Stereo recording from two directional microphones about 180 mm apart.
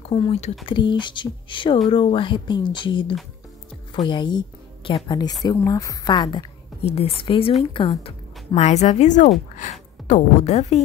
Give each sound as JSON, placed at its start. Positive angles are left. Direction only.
{"t": 0.1, "sound": "a woman's voice", "side_deg": 35}